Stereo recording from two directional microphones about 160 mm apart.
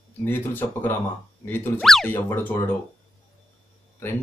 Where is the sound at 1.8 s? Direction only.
Centre (ahead or behind).